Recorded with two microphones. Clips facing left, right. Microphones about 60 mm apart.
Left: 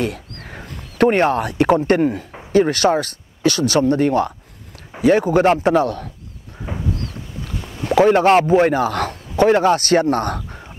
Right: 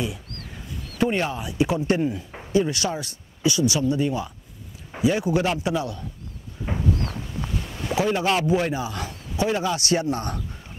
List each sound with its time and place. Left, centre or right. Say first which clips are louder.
0.5 s speech: left 4 dB; left
5.0 s a man's voice: left 8 dB; left
6.6 s a sound: even; centre
7.9 s a man's voice: left 10 dB; left